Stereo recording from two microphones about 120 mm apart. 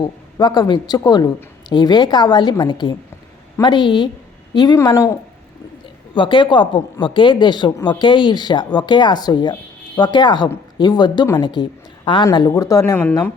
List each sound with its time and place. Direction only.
0.0 s speech: 35° left (ahead or behind)
6.1 s a woman's voice: 40° left (ahead or behind)
12.5 s speech: 25° left (ahead or behind)